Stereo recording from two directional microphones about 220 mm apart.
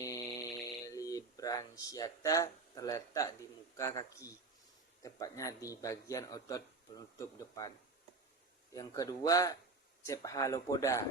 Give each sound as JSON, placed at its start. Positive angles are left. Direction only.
{"t": 0.0, "sound": "snoring", "side_deg": 15}
{"t": 3.8, "sound": "speech", "side_deg": 15}
{"t": 8.7, "sound": "speech", "side_deg": 15}